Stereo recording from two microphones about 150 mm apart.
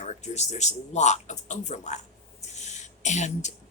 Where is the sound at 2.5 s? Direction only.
50° left (ahead or behind).